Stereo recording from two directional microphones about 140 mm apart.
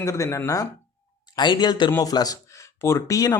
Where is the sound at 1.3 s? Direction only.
35° left (ahead or behind).